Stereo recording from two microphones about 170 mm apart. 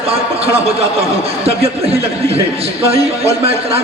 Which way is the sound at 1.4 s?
35° right (ahead or behind).